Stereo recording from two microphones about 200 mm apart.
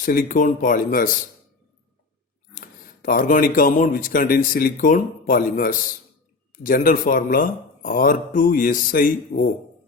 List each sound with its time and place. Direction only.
0.0 s speech: 45° left (ahead or behind)
2.6 s speech: 45° left (ahead or behind)